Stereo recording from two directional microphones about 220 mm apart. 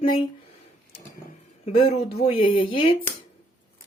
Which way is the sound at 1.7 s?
25° left (ahead or behind).